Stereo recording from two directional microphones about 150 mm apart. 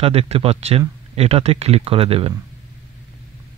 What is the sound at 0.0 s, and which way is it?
Speech, 40° right (ahead or behind).